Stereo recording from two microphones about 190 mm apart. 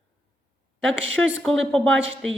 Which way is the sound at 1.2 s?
10° left (ahead or behind).